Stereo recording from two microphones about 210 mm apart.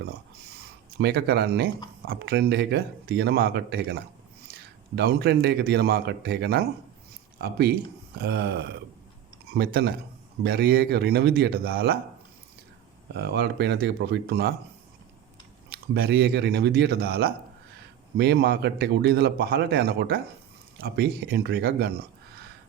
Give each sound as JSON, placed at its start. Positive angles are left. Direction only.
{"t": 0.9, "sound": "a man's voice", "side_deg": -50}
{"t": 13.1, "sound": "a man's voice", "side_deg": -50}
{"t": 15.7, "sound": "a man's voice", "side_deg": -50}